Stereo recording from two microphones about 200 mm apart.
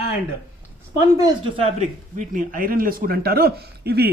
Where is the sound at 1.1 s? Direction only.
20° right (ahead or behind); by 4.0 s 50° right (ahead or behind).